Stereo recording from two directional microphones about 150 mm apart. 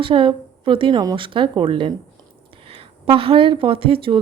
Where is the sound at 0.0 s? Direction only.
35° right (ahead or behind).